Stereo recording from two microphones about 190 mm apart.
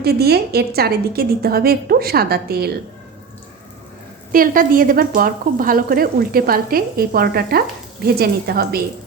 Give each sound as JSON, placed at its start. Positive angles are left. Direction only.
{"t": 0.0, "sound": "a woman's voice", "side_deg": -55}
{"t": 4.3, "sound": "a woman's voice", "side_deg": -50}